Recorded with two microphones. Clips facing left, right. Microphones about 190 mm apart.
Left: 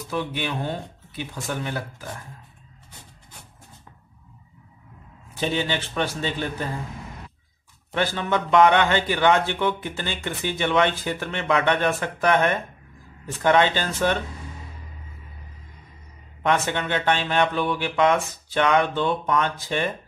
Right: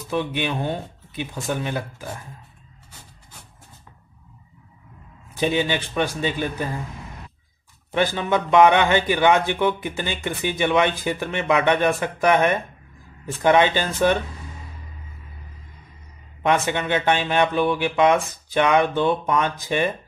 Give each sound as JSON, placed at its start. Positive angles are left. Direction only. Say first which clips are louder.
{"t": 0.1, "sound": "speech", "louder": "right 3 dB", "side_deg": -20}
{"t": 5.4, "sound": "speech", "louder": "right 3 dB", "side_deg": -15}
{"t": 7.9, "sound": "speech", "louder": "right 3 dB", "side_deg": -15}
{"t": 16.4, "sound": "speech", "louder": "right 2 dB", "side_deg": -15}